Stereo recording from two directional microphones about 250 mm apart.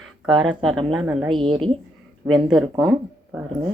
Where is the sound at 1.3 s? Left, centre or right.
Centre.